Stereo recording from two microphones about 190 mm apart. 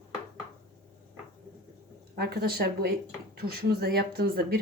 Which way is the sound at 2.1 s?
55° right (ahead or behind).